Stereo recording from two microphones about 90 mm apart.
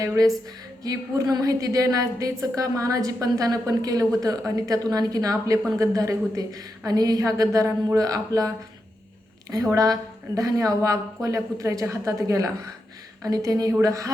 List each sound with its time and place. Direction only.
0.2 s a woman's voice: 40° right (ahead or behind)